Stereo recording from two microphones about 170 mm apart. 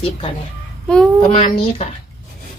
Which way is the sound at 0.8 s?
Centre (ahead or behind).